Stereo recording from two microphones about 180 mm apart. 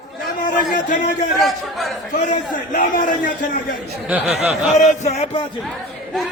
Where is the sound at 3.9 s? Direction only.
5° right (ahead or behind).